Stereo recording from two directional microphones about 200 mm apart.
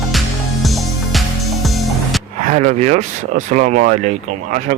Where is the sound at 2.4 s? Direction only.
40° right (ahead or behind).